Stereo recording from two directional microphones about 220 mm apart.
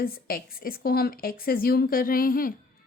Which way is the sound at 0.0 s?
40° left (ahead or behind).